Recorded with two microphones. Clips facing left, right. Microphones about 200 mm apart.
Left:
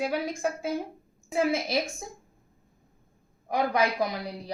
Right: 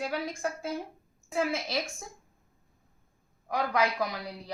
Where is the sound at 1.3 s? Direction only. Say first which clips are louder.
Left 4 dB; 20° left (ahead or behind).